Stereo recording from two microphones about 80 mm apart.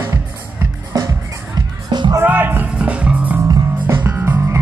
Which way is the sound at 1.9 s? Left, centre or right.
Right.